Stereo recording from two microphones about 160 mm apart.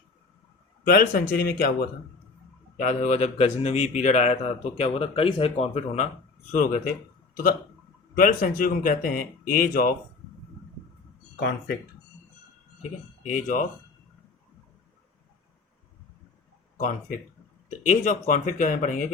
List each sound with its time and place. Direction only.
0.9 s speech: 65° left (ahead or behind)
2.7 s a man's voice: 50° left (ahead or behind)
6.5 s speech: 55° left (ahead or behind)
8.1 s speech: 60° left (ahead or behind)
13.2 s speech: 55° left (ahead or behind)
16.7 s a man's voice: 55° left (ahead or behind)